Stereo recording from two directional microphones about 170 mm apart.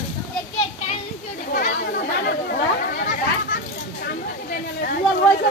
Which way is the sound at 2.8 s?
65° left (ahead or behind).